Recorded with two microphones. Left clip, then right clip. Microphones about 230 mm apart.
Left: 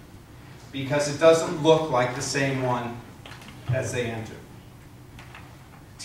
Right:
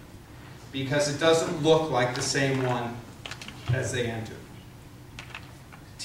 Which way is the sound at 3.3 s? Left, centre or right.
Centre.